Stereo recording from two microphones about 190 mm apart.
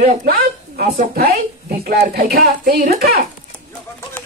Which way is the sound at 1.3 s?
55° right (ahead or behind).